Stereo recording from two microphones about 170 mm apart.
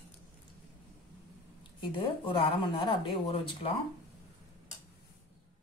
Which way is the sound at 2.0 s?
30° left (ahead or behind).